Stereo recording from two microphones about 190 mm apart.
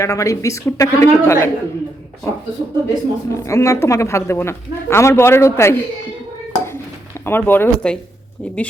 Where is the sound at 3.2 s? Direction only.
15° left (ahead or behind).